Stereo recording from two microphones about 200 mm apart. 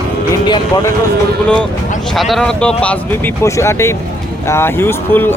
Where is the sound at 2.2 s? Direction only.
Centre (ahead or behind).